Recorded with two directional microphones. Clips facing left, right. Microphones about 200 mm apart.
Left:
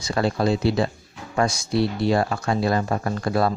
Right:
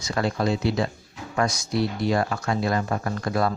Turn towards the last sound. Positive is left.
turn(degrees=30)  # may be behind; listen again after turning